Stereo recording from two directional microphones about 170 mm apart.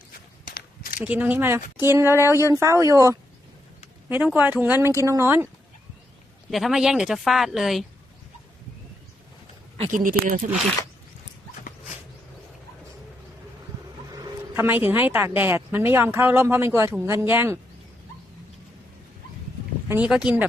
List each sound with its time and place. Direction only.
0.4 s a sound: 60° left (ahead or behind)
0.9 s speech: 10° right (ahead or behind)
2.2 s speech: 20° left (ahead or behind)
2.5 s speech: 15° right (ahead or behind)
6.5 s a woman's voice: centre (ahead or behind)
9.9 s speech: 55° right (ahead or behind)
14.2 s a sound: 15° right (ahead or behind)
15.4 s speech: 10° right (ahead or behind)
19.9 s speech: 5° right (ahead or behind)